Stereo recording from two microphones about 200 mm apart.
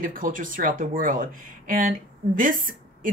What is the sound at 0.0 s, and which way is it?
Speech, 45° right (ahead or behind).